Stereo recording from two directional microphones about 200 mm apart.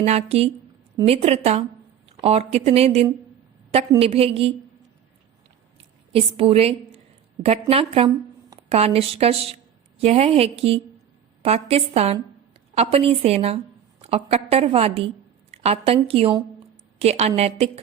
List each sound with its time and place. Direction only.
0.0 s a woman's voice: 35° right (ahead or behind)
5.7 s a sound: 30° right (ahead or behind)
7.4 s a woman's voice: 30° right (ahead or behind)